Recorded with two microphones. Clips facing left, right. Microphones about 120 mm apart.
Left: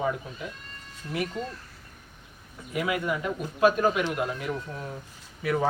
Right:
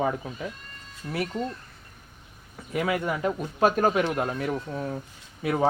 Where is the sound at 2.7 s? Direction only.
30° right (ahead or behind).